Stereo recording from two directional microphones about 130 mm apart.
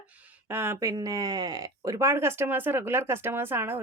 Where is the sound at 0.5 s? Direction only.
15° right (ahead or behind).